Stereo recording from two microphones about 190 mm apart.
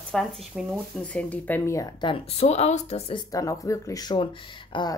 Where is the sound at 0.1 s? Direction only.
Centre (ahead or behind).